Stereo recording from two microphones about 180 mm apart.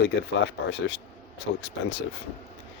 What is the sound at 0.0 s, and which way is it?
Speech, 70° left (ahead or behind).